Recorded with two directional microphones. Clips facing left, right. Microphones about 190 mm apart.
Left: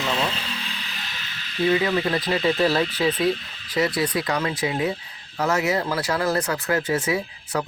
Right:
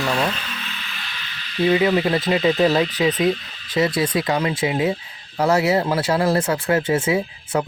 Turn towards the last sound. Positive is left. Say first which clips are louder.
# right 4 dB
turn(degrees=-25)  # may be behind; listen again after turning